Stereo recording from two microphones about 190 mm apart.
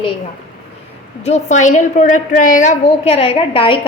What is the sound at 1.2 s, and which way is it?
A woman's voice, 40° left (ahead or behind).